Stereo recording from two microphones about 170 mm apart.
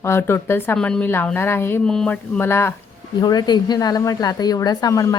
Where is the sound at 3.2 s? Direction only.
25° left (ahead or behind).